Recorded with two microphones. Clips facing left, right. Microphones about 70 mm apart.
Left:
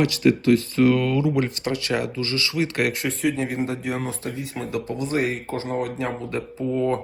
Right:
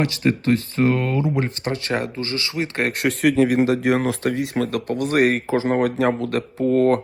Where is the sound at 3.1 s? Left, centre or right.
Right.